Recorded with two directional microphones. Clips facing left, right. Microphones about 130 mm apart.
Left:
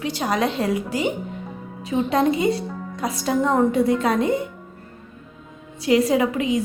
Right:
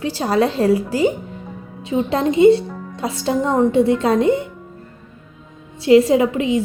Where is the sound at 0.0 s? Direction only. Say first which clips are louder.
Right 5 dB; 30° right (ahead or behind).